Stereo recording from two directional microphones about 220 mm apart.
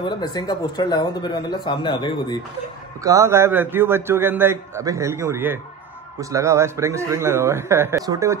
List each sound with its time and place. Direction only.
0.0 s speech: 20° left (ahead or behind)
3.0 s a man's voice: 15° right (ahead or behind)